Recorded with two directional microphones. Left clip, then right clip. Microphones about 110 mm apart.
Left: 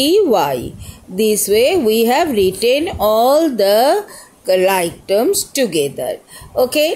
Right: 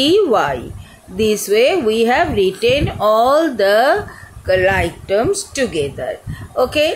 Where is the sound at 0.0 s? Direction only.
45° left (ahead or behind).